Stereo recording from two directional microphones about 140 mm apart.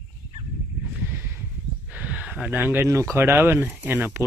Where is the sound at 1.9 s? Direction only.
10° right (ahead or behind).